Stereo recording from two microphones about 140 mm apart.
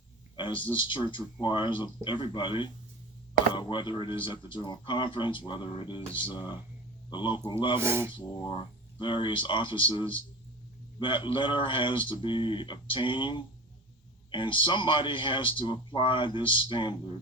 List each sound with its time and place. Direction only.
0.3 s speech: 35° left (ahead or behind)
7.8 s speech: 20° right (ahead or behind)
8.1 s speech: 30° left (ahead or behind)